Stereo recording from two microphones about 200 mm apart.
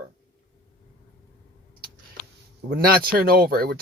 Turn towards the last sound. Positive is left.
turn(degrees=-50)  # may be behind; listen again after turning